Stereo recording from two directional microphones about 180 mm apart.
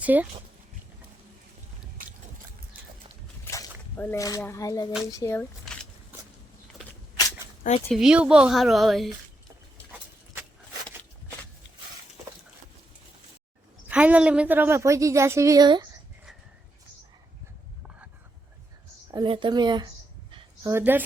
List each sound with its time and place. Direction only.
0.0 s speech: 10° right (ahead or behind)
3.4 s a sound: 15° left (ahead or behind)
4.2 s speech: 15° left (ahead or behind)
5.6 s zipper: 5° left (ahead or behind)
7.9 s speech: 5° right (ahead or behind)
13.8 s a woman's voice: 10° right (ahead or behind)
19.1 s speech: 25° right (ahead or behind)
20.7 s a woman's voice: 10° right (ahead or behind)